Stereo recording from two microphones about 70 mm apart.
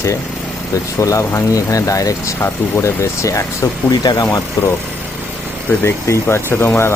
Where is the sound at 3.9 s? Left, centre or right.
Left.